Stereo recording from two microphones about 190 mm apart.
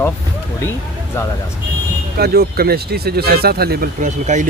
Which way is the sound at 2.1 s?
55° right (ahead or behind).